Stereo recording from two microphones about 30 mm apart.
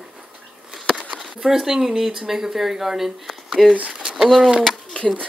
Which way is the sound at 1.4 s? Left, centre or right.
Centre.